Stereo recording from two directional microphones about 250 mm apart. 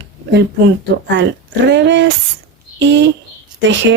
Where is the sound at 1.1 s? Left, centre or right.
Right.